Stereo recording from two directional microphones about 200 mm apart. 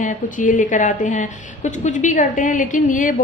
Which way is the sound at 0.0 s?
40° left (ahead or behind).